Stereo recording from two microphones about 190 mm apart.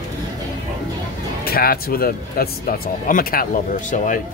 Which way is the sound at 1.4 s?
55° left (ahead or behind).